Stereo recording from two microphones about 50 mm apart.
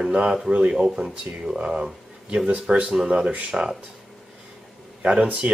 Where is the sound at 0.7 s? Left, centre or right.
Centre.